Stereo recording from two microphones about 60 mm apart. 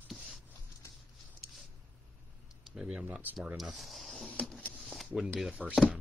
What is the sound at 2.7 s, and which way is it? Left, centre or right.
Speech, centre.